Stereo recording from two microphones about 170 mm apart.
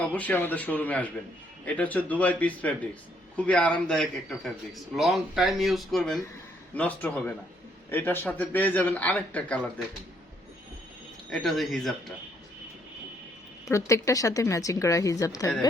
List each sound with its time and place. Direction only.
0.0 s a man's voice: 10° left (ahead or behind)
11.3 s speech: centre (ahead or behind)
13.7 s speech: 15° left (ahead or behind)